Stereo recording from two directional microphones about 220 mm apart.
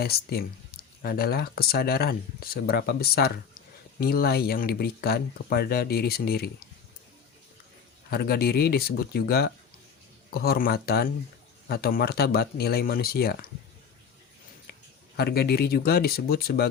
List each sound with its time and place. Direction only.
0.0 s speech: 45° left (ahead or behind)
8.1 s speech: 45° left (ahead or behind)
14.7 s speech: 45° left (ahead or behind)